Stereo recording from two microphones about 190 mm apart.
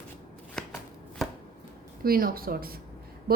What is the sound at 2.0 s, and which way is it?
Speech, 50° right (ahead or behind).